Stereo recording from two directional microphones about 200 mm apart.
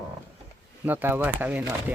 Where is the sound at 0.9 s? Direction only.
10° right (ahead or behind).